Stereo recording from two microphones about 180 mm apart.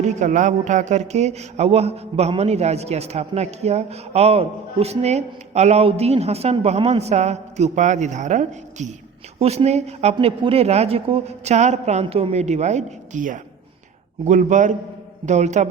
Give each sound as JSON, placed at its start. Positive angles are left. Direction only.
{"t": 0.0, "sound": "a man's voice", "side_deg": -40}